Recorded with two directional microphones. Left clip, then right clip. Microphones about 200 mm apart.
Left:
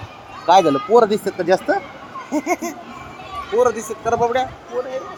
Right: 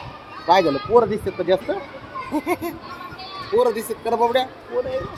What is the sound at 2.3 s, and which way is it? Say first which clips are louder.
A man's voice: left 3 dB; 5° left (ahead or behind).